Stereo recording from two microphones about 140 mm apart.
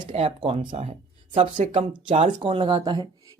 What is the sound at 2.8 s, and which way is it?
Speech, 30° right (ahead or behind).